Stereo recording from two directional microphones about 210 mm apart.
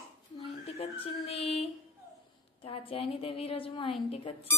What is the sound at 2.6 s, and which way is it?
A woman's voice, 25° left (ahead or behind).